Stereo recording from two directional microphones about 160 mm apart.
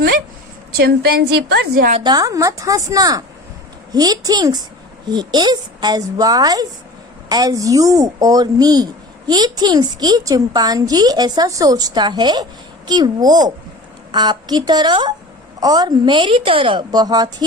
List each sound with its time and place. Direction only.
0.8 s a woman's voice: 75° right (ahead or behind)
2.0 s speech: 20° right (ahead or behind)